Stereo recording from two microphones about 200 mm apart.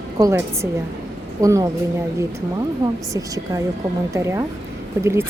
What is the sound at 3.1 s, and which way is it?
A woman's voice, 15° right (ahead or behind).